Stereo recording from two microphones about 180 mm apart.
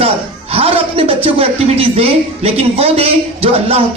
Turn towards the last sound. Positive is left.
turn(degrees=-35)  # may be behind; listen again after turning